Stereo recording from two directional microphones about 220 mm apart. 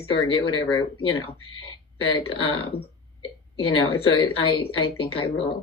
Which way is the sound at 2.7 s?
25° left (ahead or behind).